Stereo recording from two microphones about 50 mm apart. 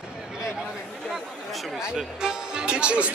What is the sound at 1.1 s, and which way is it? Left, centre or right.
Chatter, centre.